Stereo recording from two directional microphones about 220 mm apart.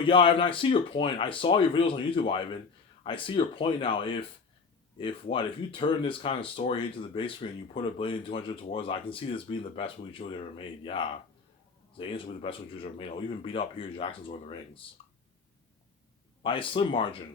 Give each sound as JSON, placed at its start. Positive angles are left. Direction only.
{"t": 0.0, "sound": "speech", "side_deg": 25}
{"t": 16.4, "sound": "speech", "side_deg": 25}